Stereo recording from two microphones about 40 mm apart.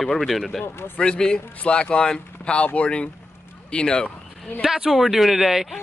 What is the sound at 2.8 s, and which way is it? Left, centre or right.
Speech, left.